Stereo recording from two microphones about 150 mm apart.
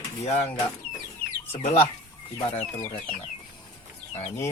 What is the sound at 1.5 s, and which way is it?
Speech, 40° left (ahead or behind).